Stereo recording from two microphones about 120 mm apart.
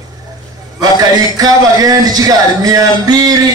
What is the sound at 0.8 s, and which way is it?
Speech, 30° right (ahead or behind).